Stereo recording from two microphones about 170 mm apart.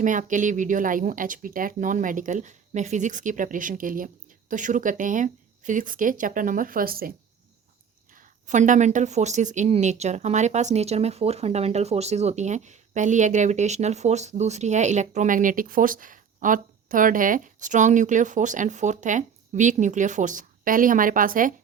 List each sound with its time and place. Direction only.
0.0 s speech: 50° right (ahead or behind)
8.1 s speech: 50° right (ahead or behind)